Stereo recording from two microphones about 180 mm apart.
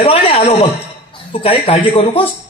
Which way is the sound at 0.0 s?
30° left (ahead or behind).